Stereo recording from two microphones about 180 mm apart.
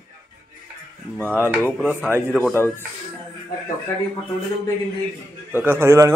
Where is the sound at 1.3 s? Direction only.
10° right (ahead or behind).